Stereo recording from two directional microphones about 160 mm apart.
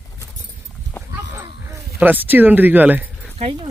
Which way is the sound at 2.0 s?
10° right (ahead or behind).